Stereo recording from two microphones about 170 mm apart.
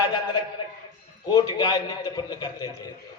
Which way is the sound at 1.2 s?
25° left (ahead or behind).